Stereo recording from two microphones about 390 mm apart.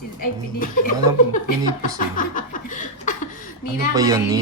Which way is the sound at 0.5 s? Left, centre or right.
Left.